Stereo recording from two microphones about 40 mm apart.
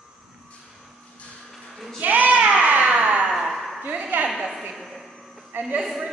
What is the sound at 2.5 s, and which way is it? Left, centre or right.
Music, right.